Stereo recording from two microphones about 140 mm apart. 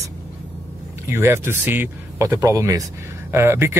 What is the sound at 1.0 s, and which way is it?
Speech, 15° right (ahead or behind).